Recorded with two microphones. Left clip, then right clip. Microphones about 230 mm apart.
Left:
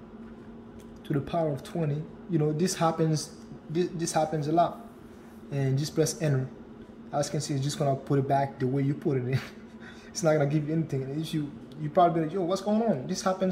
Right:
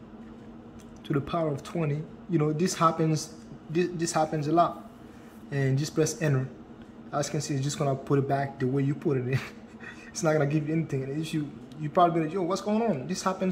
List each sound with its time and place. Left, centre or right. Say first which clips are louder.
1.0 s speech: even; centre